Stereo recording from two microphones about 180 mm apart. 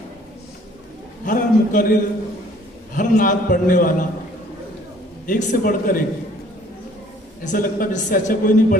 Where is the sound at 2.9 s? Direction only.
45° left (ahead or behind).